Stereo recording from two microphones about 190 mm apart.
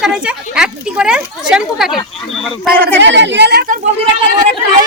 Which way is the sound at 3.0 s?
70° right (ahead or behind).